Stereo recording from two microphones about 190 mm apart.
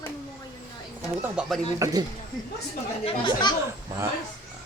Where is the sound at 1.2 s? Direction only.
Centre (ahead or behind).